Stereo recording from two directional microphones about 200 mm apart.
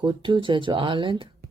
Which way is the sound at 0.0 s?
25° right (ahead or behind).